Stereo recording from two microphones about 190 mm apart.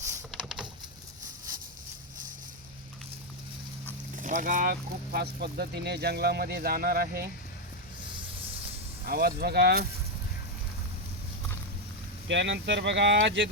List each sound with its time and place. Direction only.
0.3 s a sound: 5° right (ahead or behind)
4.2 s speech: 45° right (ahead or behind)
9.0 s speech: 55° right (ahead or behind)
12.3 s speech: 70° right (ahead or behind)